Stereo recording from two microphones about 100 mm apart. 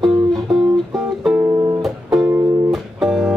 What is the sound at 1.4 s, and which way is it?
Music, 30° right (ahead or behind).